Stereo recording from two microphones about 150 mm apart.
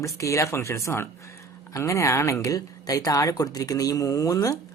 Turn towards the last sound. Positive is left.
turn(degrees=25)  # may be behind; listen again after turning